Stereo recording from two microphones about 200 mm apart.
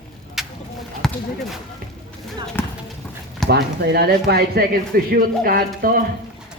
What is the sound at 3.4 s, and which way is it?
Speech, 55° right (ahead or behind).